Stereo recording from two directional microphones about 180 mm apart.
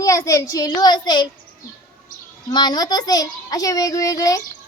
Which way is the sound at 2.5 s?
25° left (ahead or behind).